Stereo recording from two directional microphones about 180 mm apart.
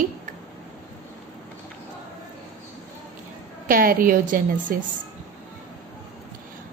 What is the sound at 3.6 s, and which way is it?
A woman's voice, 50° right (ahead or behind).